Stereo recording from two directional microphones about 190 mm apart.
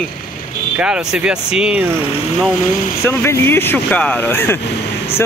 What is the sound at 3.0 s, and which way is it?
Speech, 10° left (ahead or behind).